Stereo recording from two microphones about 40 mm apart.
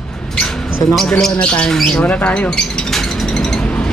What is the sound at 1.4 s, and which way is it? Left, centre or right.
Speech, left.